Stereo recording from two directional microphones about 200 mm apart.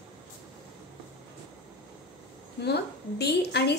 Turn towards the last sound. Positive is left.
turn(degrees=55)  # may be behind; listen again after turning